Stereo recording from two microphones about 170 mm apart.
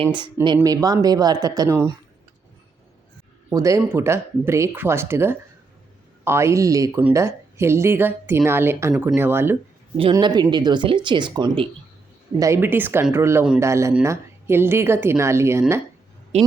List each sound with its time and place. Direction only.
0.4 s speech: 25° right (ahead or behind)
3.5 s speech: 20° right (ahead or behind)
10.0 s speech: 25° right (ahead or behind)
12.4 s speech: 15° right (ahead or behind)